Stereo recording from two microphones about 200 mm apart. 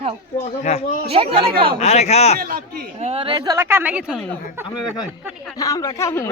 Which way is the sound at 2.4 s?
45° right (ahead or behind).